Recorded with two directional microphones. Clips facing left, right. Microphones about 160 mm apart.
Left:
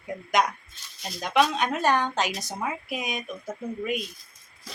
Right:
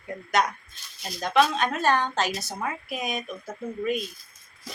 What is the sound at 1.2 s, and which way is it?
A woman's voice, 15° left (ahead or behind).